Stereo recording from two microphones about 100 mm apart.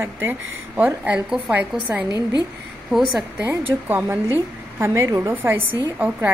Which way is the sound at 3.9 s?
25° right (ahead or behind).